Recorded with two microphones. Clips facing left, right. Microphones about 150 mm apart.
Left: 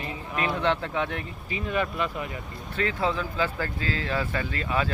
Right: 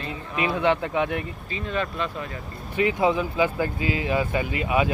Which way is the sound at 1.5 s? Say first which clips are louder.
Left 1 dB; 15° left (ahead or behind).